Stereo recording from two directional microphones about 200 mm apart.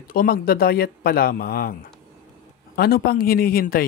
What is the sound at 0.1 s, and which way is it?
A man's voice, 45° left (ahead or behind).